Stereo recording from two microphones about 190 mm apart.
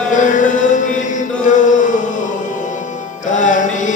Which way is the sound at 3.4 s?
40° left (ahead or behind).